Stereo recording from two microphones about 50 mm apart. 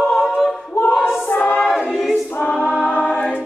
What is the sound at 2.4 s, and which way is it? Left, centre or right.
Choir, left.